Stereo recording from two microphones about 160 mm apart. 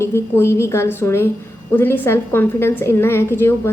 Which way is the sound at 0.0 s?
15° left (ahead or behind).